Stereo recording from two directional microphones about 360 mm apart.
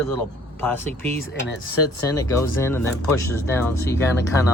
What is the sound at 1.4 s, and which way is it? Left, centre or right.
Speech, left.